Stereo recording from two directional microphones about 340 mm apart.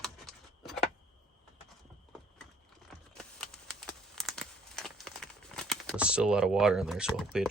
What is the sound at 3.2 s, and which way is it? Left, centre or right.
Crumpling, centre.